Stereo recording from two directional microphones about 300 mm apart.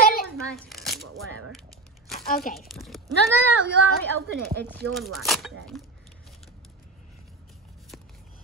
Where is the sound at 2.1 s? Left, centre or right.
Left.